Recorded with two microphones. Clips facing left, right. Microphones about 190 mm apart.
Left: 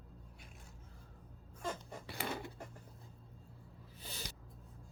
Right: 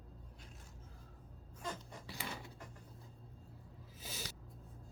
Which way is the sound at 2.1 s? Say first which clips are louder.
Left 6 dB; 60° left (ahead or behind).